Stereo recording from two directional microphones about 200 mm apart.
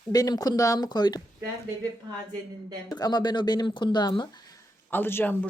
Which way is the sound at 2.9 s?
20° left (ahead or behind).